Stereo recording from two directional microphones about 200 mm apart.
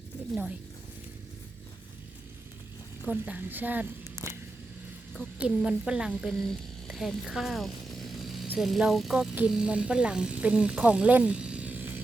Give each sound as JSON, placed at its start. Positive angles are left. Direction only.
{"t": 3.1, "sound": "a woman's voice", "side_deg": -10}
{"t": 5.4, "sound": "a woman's voice", "side_deg": -5}